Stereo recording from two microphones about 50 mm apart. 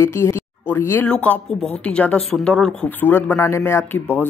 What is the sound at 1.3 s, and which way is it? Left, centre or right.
Speech, left.